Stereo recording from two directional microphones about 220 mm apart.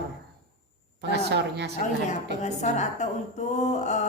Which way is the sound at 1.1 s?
50° right (ahead or behind).